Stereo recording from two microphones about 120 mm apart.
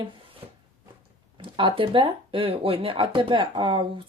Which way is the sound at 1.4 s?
45° right (ahead or behind).